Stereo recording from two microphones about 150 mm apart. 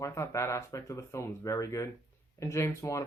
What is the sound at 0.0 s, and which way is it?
Speech, 20° left (ahead or behind).